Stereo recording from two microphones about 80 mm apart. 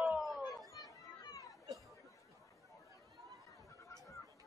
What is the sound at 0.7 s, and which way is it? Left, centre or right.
Chatter, left.